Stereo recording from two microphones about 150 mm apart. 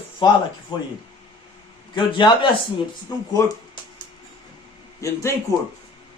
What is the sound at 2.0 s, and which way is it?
Speech, 30° left (ahead or behind).